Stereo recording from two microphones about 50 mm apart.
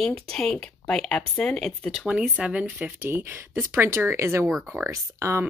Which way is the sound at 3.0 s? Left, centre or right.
Right.